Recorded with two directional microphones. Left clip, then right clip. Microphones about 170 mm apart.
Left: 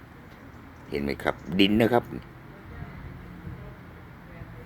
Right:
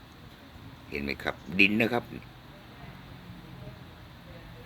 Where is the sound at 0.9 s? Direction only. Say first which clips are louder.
Left 5 dB; 15° left (ahead or behind).